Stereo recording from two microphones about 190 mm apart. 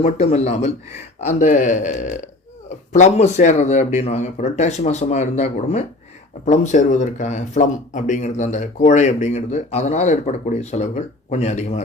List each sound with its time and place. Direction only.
0.0 s speech: 35° left (ahead or behind)